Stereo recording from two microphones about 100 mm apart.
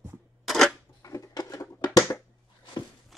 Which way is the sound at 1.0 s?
35° left (ahead or behind).